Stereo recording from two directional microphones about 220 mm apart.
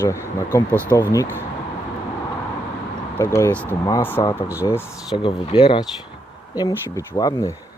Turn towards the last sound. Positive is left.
turn(degrees=20)  # may be behind; listen again after turning